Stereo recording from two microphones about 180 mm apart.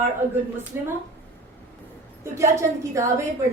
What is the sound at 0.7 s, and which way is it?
Speech, 15° right (ahead or behind).